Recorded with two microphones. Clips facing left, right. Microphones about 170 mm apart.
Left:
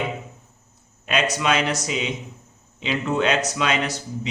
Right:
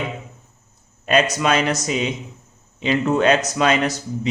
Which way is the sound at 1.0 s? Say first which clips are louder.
Right 4 dB; 40° right (ahead or behind).